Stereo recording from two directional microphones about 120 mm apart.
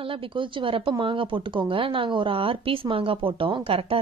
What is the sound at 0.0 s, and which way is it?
Speech, 50° right (ahead or behind).